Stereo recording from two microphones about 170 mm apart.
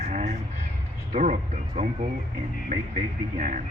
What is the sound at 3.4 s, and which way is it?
Speech, 45° right (ahead or behind).